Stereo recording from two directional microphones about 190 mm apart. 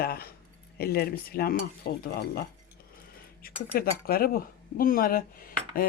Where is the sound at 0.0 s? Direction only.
55° left (ahead or behind).